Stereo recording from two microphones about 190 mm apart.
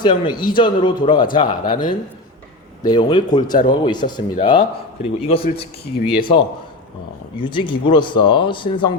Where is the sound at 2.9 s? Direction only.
25° left (ahead or behind).